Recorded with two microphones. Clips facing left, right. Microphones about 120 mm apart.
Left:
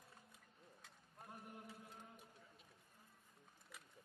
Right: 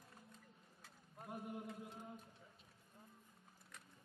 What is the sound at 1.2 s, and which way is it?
Chant, 20° right (ahead or behind).